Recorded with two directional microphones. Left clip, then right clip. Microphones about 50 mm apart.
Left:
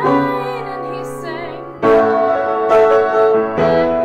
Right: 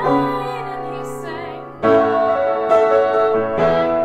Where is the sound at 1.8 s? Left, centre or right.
Left.